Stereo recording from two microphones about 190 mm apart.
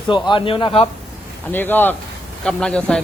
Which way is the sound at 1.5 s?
10° left (ahead or behind).